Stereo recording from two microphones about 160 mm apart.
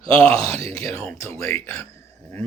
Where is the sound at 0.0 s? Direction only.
35° right (ahead or behind).